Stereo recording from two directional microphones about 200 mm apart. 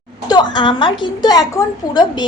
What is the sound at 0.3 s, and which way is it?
A woman's voice, 20° left (ahead or behind).